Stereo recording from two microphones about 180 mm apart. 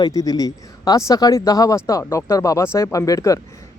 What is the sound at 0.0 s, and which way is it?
Speech, 20° left (ahead or behind).